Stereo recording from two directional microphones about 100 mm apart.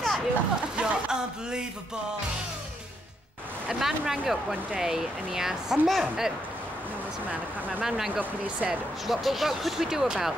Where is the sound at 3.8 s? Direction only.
5° right (ahead or behind).